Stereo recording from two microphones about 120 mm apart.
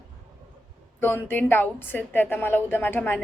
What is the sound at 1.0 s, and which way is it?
A woman's voice, 15° left (ahead or behind).